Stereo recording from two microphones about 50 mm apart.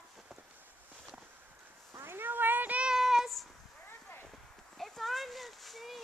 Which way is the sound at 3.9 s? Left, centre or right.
Left.